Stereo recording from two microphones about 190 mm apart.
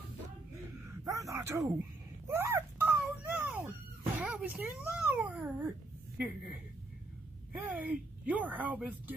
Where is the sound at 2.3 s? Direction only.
10° right (ahead or behind).